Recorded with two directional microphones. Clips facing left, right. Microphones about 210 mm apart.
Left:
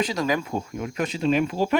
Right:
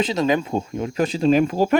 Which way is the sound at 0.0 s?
25° right (ahead or behind).